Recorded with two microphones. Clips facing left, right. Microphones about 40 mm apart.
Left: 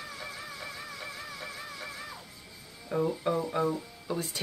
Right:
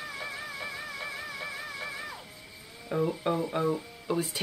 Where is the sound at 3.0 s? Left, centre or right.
Right.